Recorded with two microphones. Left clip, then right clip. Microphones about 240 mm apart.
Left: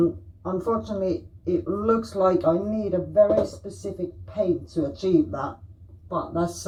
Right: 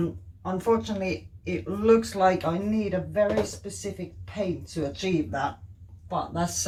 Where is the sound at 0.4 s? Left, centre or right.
Right.